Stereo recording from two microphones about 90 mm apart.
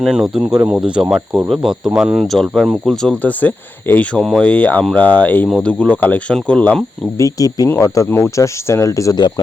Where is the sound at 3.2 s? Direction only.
15° left (ahead or behind).